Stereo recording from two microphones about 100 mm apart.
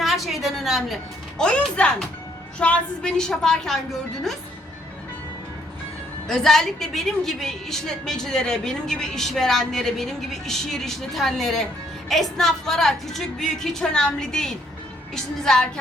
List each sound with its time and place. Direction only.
0.0 s a woman's voice: centre (ahead or behind)
1.4 s a woman's voice: 10° left (ahead or behind)
6.2 s a woman's voice: 5° left (ahead or behind)